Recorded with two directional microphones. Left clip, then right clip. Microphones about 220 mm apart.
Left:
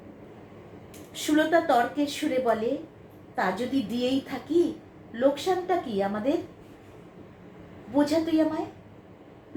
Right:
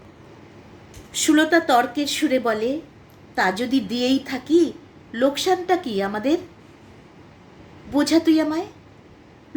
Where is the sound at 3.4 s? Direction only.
50° right (ahead or behind).